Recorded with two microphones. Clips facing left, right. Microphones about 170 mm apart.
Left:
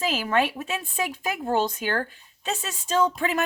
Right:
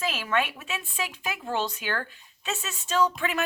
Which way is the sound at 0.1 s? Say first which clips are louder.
Left 4 dB; 35° left (ahead or behind).